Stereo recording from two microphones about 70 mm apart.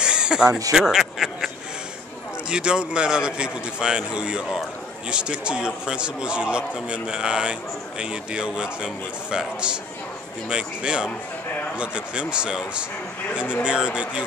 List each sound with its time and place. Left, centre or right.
0.0 s a sound: centre
0.5 s speech: right
0.7 s a man's voice: centre
2.5 s a man's voice: centre